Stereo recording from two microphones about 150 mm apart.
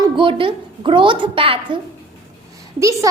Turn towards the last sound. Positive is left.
turn(degrees=-20)  # may be behind; listen again after turning